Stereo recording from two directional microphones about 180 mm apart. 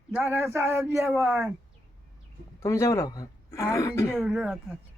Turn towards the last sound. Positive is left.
turn(degrees=-5)  # may be behind; listen again after turning